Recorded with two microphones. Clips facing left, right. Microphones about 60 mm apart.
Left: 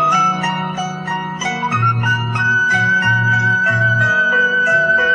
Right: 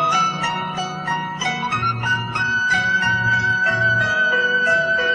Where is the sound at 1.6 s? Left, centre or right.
Centre.